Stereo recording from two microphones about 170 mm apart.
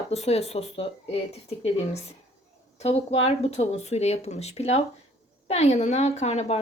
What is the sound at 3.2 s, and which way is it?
A woman's voice, 40° left (ahead or behind).